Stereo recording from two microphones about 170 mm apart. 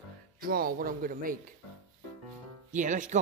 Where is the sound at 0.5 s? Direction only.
60° right (ahead or behind).